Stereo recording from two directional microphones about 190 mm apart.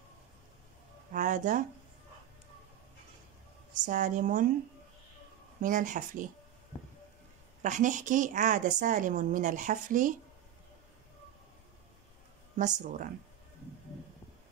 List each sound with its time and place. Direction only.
1.1 s speech: 45° right (ahead or behind)
3.8 s a woman's voice: 40° right (ahead or behind)
5.6 s speech: 45° right (ahead or behind)
7.6 s a woman's voice: 40° right (ahead or behind)
12.5 s a woman's voice: 40° right (ahead or behind)